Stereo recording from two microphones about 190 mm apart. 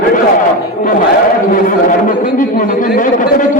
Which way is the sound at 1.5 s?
45° left (ahead or behind).